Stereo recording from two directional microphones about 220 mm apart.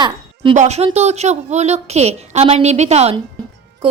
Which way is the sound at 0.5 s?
30° right (ahead or behind).